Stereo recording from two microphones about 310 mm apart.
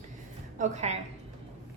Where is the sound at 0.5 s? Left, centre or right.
Right.